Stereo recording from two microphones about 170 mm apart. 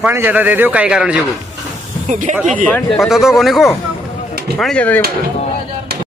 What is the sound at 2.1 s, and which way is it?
Speech, 45° right (ahead or behind).